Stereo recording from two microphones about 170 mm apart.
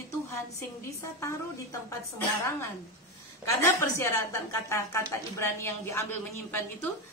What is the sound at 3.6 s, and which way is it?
A woman's voice, 15° left (ahead or behind).